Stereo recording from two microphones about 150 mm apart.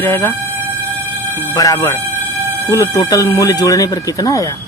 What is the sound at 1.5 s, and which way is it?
Speech, 25° left (ahead or behind).